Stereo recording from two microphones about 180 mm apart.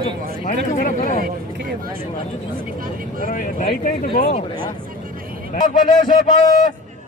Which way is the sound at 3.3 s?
45° left (ahead or behind).